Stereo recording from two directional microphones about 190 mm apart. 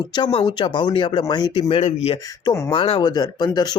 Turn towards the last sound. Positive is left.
turn(degrees=20)  # may be behind; listen again after turning